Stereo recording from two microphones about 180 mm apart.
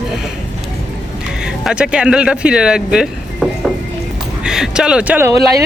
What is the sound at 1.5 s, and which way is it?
Speech, 5° right (ahead or behind).